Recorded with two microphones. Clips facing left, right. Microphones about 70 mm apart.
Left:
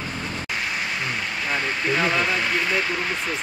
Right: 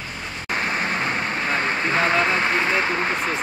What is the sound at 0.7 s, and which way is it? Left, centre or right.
Speech, right.